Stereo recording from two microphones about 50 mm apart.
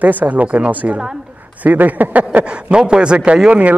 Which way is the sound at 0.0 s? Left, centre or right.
Right.